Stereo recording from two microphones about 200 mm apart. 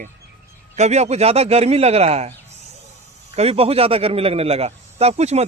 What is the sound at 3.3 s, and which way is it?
Speech, 30° right (ahead or behind).